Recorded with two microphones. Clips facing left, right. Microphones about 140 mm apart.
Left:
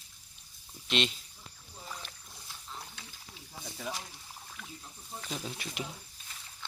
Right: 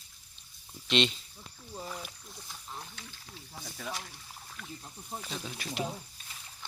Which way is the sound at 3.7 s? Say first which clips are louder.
Left 1 dB; 15° left (ahead or behind).